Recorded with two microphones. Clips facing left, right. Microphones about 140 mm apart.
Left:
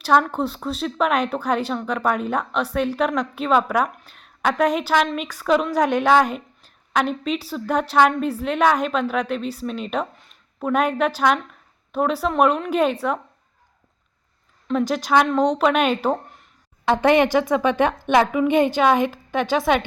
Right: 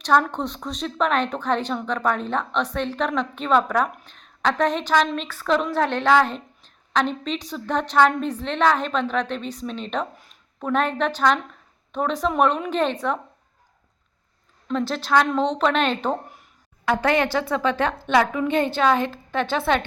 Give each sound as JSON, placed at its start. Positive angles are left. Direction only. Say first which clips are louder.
{"t": 0.0, "sound": "a woman's voice", "louder": "left 2 dB", "side_deg": 5}
{"t": 14.7, "sound": "speech", "louder": "left 2 dB", "side_deg": 10}